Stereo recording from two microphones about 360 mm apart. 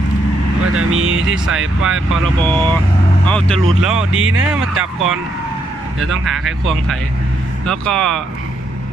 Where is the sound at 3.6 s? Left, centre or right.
Right.